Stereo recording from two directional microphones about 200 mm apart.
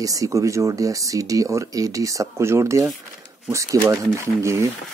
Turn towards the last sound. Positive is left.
turn(degrees=-15)  # may be behind; listen again after turning